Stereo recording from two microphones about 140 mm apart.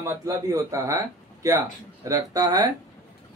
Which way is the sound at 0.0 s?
20° right (ahead or behind).